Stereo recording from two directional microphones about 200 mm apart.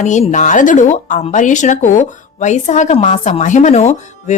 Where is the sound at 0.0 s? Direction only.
35° left (ahead or behind).